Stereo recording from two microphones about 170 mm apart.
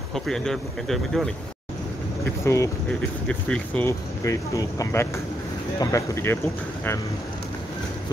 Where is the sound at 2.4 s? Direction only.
15° left (ahead or behind).